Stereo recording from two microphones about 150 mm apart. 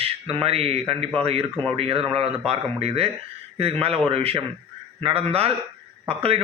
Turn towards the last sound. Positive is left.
turn(degrees=-40)  # may be behind; listen again after turning